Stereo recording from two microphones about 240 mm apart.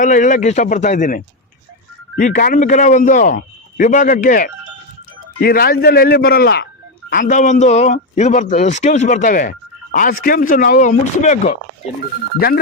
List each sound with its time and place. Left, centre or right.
0.0 s speech: left